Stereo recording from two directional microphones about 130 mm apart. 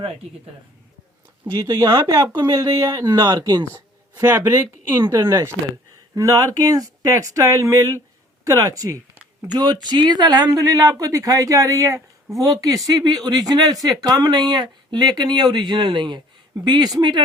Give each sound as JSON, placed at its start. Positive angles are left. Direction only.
{"t": 1.5, "sound": "speech", "side_deg": -30}